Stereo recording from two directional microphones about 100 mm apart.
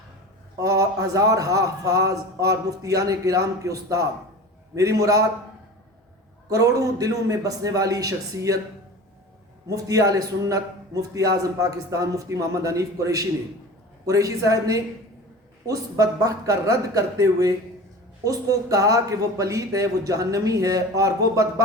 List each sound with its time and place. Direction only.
0.6 s a man's voice: 35° right (ahead or behind)
6.5 s a man's voice: 35° right (ahead or behind)
9.6 s a man's voice: 35° right (ahead or behind)